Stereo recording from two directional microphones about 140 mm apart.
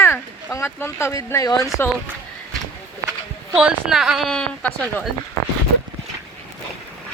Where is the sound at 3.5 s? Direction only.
5° right (ahead or behind).